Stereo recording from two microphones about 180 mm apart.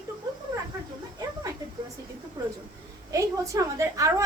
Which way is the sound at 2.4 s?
20° right (ahead or behind).